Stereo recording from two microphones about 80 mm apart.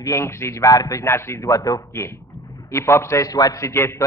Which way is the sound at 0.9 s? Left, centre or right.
Left.